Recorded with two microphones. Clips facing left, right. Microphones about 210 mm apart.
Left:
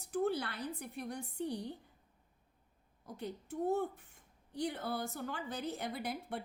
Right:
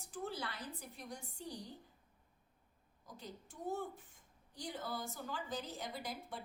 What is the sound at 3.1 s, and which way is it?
A woman's voice, 65° left (ahead or behind).